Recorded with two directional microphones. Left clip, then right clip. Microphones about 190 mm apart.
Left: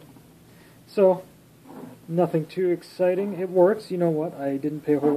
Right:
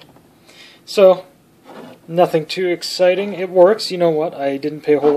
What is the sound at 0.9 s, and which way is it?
Speech, 15° right (ahead or behind).